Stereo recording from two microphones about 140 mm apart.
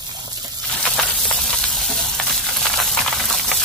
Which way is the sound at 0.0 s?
30° right (ahead or behind).